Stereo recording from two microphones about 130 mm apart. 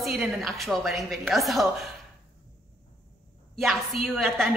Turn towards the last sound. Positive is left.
turn(degrees=5)  # may be behind; listen again after turning